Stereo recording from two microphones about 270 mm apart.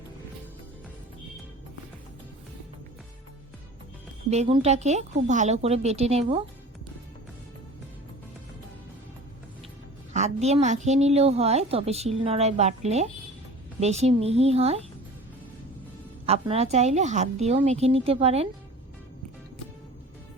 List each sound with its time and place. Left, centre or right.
4.3 s a woman's voice: right
10.1 s a woman's voice: right
16.2 s a woman's voice: right